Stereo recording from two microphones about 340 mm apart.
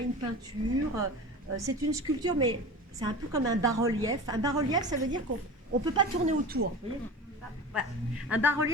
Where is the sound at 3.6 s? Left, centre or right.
Centre.